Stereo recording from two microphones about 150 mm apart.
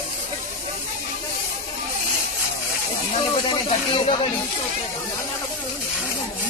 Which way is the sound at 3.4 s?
40° left (ahead or behind).